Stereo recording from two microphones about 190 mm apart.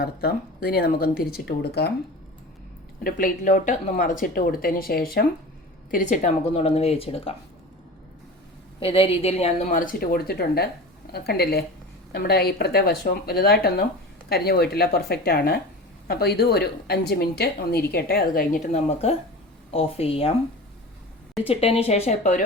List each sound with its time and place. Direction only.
0.0 s a woman's voice: 55° left (ahead or behind)
3.0 s a woman's voice: 45° left (ahead or behind)
5.9 s speech: 40° left (ahead or behind)
8.8 s a woman's voice: 30° left (ahead or behind)
21.4 s speech: 30° left (ahead or behind)